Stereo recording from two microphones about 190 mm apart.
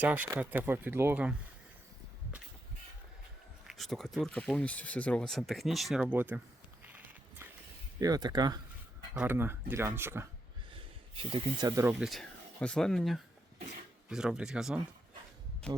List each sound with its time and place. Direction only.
0.0 s speech: 10° right (ahead or behind)
3.7 s speech: centre (ahead or behind)
7.9 s speech: 20° right (ahead or behind)
10.8 s speech: 30° right (ahead or behind); by 15.8 s 5° left (ahead or behind)